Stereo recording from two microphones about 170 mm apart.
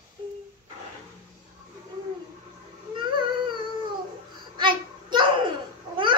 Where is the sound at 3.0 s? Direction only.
30° right (ahead or behind).